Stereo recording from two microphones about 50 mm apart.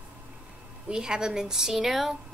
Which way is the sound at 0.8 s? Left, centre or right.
Centre.